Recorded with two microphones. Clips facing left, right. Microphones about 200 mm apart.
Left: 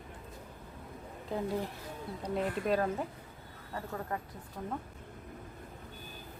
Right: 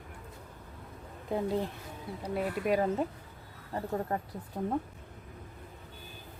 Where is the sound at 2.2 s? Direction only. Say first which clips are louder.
Right 1 dB; 5° right (ahead or behind).